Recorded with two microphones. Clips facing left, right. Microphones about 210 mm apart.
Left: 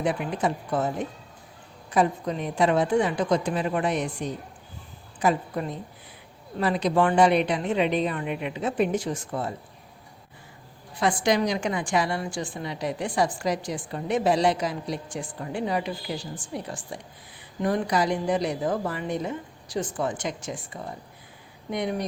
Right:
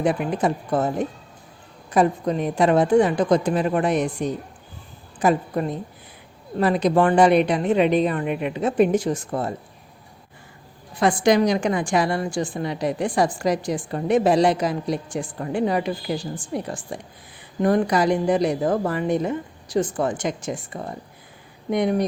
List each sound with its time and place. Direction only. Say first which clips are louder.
0.0 s a woman's voice: right 5 dB; 45° right (ahead or behind)
11.0 s a woman's voice: right 6 dB; 45° right (ahead or behind)
20.1 s a woman's voice: right 5 dB; 45° right (ahead or behind)